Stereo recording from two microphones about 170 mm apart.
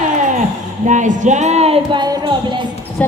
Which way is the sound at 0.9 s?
45° right (ahead or behind).